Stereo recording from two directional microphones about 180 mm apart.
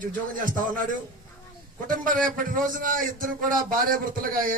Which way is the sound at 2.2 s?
50° right (ahead or behind).